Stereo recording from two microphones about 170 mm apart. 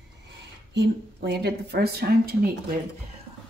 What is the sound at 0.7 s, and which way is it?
A woman's voice, 80° right.